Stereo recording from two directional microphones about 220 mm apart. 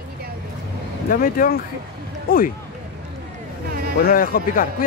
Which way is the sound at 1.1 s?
40° left (ahead or behind).